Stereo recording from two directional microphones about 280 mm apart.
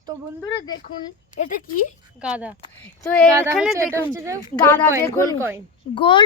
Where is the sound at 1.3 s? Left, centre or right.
Left.